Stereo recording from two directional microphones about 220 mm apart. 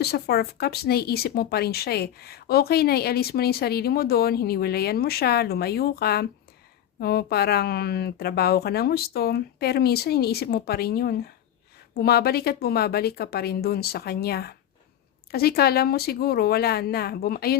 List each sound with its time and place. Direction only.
0.0 s speech: 45° left (ahead or behind)